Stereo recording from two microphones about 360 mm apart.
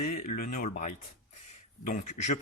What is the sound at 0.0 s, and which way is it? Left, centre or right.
Speech, left.